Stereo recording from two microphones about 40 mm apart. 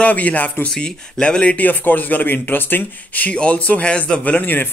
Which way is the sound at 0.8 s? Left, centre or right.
Left.